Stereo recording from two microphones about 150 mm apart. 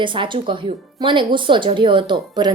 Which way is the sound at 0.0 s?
35° right (ahead or behind).